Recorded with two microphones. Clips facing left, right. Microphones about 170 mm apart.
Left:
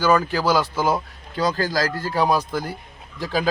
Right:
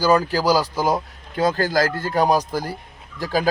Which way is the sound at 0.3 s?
35° right (ahead or behind).